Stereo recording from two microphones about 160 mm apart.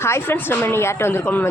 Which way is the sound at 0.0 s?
15° left (ahead or behind).